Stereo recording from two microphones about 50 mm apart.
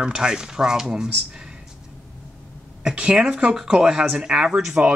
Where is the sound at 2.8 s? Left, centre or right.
Centre.